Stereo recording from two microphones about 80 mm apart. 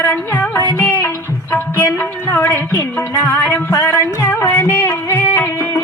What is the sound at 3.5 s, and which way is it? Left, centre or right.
Music, left.